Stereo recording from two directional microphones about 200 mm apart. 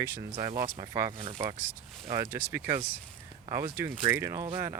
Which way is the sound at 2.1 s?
10° right (ahead or behind).